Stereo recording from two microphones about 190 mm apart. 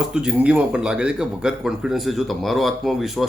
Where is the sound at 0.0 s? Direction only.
5° right (ahead or behind).